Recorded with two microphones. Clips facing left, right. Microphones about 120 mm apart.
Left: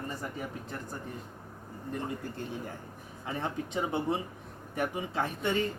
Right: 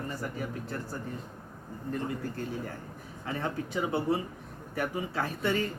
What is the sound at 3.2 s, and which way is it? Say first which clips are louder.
Speech: right 1 dB; 20° left (ahead or behind).